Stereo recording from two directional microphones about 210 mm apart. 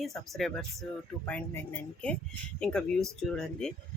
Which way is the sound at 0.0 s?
Centre (ahead or behind).